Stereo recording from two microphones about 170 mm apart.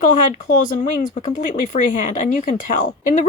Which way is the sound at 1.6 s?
50° left (ahead or behind).